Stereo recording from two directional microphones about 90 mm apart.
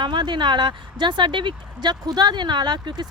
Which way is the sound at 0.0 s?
60° right (ahead or behind).